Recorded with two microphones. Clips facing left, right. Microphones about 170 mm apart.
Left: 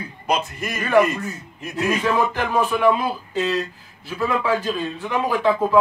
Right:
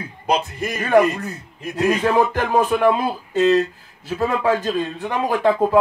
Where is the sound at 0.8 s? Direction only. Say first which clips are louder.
Right 2 dB; 45° right (ahead or behind).